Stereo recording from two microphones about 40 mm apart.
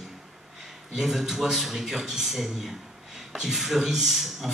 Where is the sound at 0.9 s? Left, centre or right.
Centre.